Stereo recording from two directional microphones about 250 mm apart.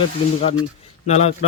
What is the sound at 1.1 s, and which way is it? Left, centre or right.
Speech, left.